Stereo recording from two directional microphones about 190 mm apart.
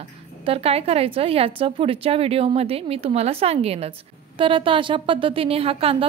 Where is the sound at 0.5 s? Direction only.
30° right (ahead or behind).